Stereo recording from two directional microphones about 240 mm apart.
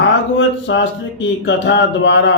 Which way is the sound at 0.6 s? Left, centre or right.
Left.